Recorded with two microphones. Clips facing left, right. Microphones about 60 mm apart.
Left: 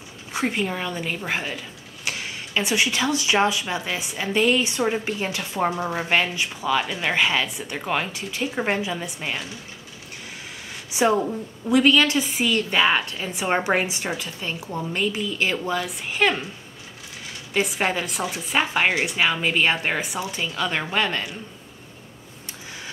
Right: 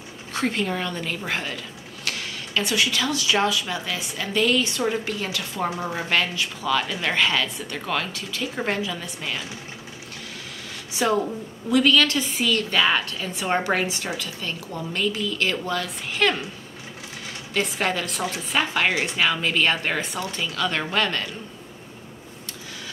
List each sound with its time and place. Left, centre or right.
0.3 s a woman's voice: centre
5.8 s a woman's voice: centre
10.9 s a sound: left
11.7 s a woman's voice: centre
17.6 s a woman's voice: centre